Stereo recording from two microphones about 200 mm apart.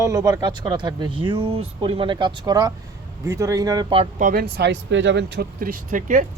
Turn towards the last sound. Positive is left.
turn(degrees=-40)  # may be behind; listen again after turning